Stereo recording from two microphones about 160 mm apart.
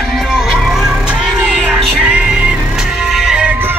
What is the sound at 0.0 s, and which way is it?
Music, centre (ahead or behind).